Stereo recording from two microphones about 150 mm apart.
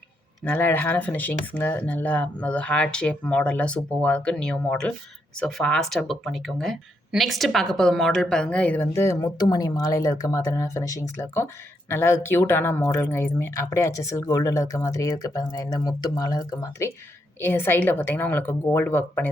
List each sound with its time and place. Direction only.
0.4 s speech: 15° left (ahead or behind)